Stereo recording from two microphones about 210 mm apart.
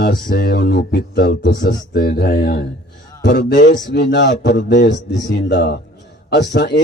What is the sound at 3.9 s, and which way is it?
Speech, 50° left (ahead or behind).